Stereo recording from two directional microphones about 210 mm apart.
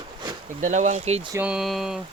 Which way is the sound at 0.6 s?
35° right (ahead or behind).